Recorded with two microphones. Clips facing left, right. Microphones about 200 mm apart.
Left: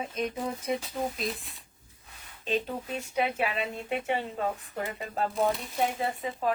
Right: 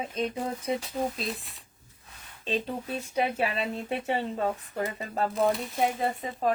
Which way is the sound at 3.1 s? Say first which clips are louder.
Right 1 dB; 35° right (ahead or behind).